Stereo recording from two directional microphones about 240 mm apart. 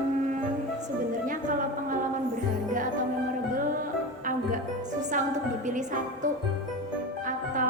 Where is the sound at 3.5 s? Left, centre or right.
Right.